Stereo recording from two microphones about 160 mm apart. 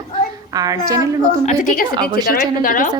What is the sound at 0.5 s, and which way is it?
Speech, 25° right (ahead or behind).